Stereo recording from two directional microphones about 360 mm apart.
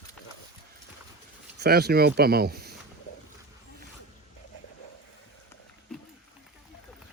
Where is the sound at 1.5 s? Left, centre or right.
Right.